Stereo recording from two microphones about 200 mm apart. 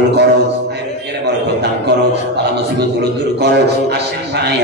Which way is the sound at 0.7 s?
55° right (ahead or behind).